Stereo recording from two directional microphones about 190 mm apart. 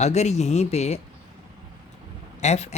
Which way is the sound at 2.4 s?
35° left (ahead or behind).